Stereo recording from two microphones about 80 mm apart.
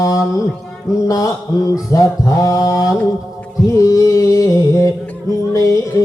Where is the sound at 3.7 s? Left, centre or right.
Left.